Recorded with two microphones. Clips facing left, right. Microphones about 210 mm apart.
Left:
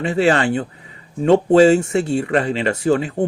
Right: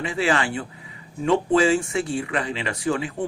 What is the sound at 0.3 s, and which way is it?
Speech, 40° left (ahead or behind).